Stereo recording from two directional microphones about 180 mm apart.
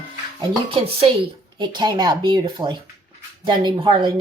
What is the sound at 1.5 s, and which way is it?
Speech, 25° right (ahead or behind).